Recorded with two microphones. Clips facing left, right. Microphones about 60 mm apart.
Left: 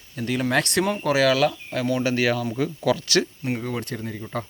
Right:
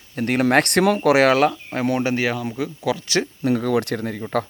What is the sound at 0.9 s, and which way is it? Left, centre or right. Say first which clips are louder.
Speech: right 5 dB; right.